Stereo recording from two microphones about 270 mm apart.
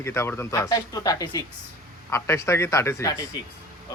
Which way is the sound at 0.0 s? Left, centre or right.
Centre.